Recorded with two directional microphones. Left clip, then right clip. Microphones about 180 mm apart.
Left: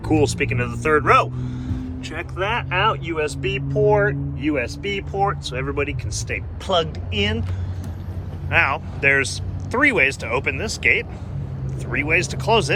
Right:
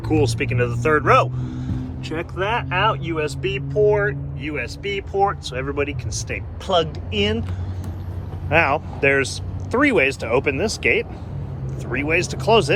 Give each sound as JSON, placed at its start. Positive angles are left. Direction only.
{"t": 0.2, "sound": "speech", "side_deg": -10}
{"t": 8.4, "sound": "speech", "side_deg": -30}